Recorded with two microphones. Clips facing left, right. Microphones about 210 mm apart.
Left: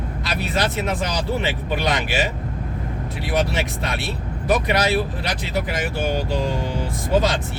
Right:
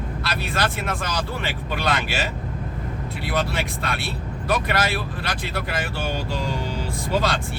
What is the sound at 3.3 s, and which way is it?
Speech, 20° left (ahead or behind).